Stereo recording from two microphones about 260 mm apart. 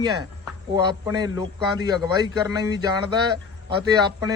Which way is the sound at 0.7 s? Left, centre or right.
Centre.